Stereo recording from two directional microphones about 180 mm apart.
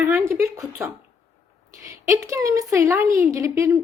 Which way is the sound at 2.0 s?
15° right (ahead or behind).